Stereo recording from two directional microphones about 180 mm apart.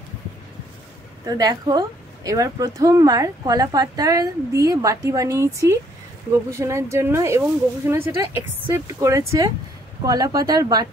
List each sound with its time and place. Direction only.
1.2 s a woman's voice: 20° right (ahead or behind)